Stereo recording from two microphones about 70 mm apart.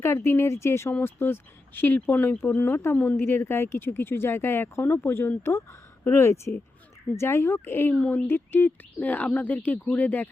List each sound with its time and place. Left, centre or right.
0.0 s speech: left
5.4 s speech: left